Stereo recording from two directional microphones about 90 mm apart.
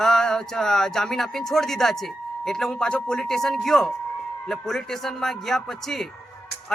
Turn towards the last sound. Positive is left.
turn(degrees=5)  # may be behind; listen again after turning